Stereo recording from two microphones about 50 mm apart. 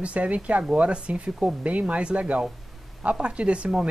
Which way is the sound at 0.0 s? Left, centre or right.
Right.